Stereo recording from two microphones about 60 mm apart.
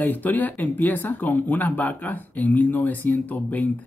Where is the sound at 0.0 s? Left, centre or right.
Left.